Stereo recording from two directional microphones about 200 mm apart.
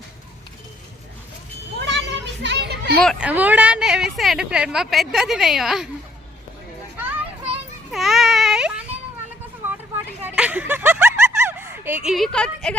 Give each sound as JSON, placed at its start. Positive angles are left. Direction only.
{"t": 1.8, "sound": "children playing", "side_deg": -65}
{"t": 3.0, "sound": "speech", "side_deg": 0}
{"t": 6.9, "sound": "children playing", "side_deg": -10}
{"t": 7.9, "sound": "baby cry", "side_deg": 0}
{"t": 10.2, "sound": "a sound", "side_deg": -5}